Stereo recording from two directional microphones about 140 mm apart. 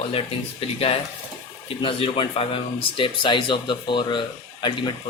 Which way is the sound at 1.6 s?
40° left (ahead or behind).